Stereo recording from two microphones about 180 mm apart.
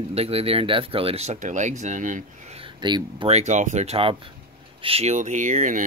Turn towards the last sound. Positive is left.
turn(degrees=-45)  # may be behind; listen again after turning